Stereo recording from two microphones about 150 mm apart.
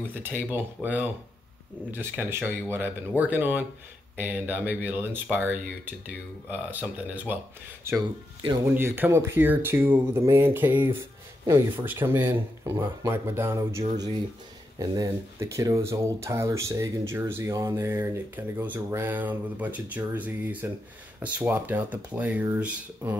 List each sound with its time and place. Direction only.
0.0 s speech: 15° right (ahead or behind)